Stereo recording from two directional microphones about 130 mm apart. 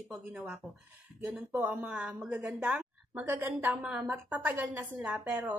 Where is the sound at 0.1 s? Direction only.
10° right (ahead or behind).